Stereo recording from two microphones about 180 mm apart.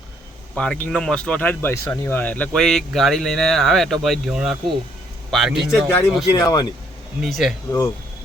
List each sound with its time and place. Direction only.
0.5 s speech: 5° left (ahead or behind)
5.9 s speech: 10° left (ahead or behind)
7.2 s speech: centre (ahead or behind)